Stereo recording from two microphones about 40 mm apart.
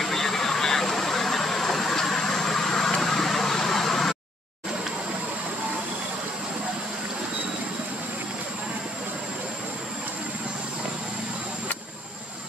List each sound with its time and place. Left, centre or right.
0.0 s vehicle: centre